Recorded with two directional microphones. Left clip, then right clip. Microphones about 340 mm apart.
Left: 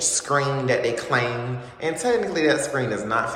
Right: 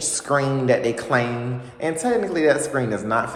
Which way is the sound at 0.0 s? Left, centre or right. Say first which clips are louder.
Right 1 dB; centre.